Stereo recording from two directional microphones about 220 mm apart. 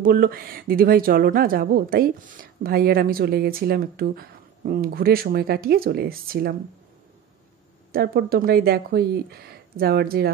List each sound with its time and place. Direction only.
0.0 s a woman's voice: 40° right (ahead or behind)
7.9 s a woman's voice: 45° right (ahead or behind)